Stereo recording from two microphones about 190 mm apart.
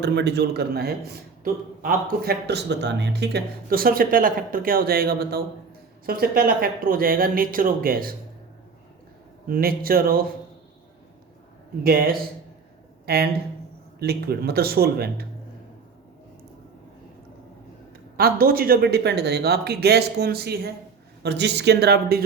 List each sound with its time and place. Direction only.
0.0 s a man's voice: 65° right (ahead or behind)
9.5 s speech: 50° right (ahead or behind)
11.8 s a man's voice: 55° right (ahead or behind)
18.2 s a man's voice: 50° right (ahead or behind)